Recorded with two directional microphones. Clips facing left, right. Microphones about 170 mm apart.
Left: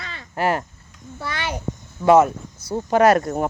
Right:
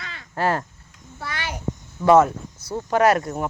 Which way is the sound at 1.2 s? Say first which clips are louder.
Left 2 dB; 25° left (ahead or behind).